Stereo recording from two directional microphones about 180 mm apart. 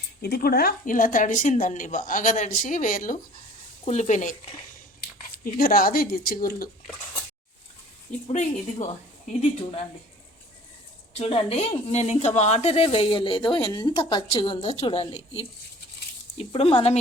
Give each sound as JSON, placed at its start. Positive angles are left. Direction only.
{"t": 0.2, "sound": "speech", "side_deg": 60}
{"t": 5.5, "sound": "speech", "side_deg": 55}
{"t": 8.3, "sound": "a woman's voice", "side_deg": 40}
{"t": 11.1, "sound": "a woman's voice", "side_deg": 35}